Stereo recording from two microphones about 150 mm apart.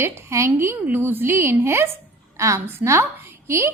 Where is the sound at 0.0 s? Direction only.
20° right (ahead or behind).